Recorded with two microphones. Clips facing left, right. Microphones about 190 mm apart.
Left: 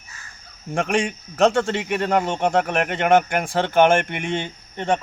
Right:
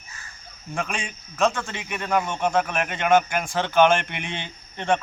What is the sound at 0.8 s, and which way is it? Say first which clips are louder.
A man's voice: left 9 dB; 70° left (ahead or behind).